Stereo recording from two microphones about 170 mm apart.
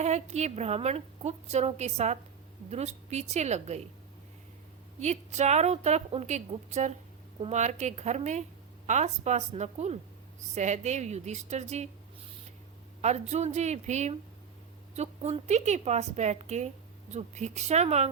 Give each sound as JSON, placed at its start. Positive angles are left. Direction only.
{"t": 0.0, "sound": "a woman's voice", "side_deg": -40}
{"t": 4.9, "sound": "a woman's voice", "side_deg": -40}
{"t": 13.0, "sound": "a woman's voice", "side_deg": -40}